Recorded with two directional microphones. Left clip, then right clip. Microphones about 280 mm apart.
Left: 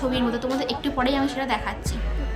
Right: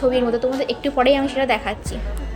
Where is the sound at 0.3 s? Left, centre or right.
Centre.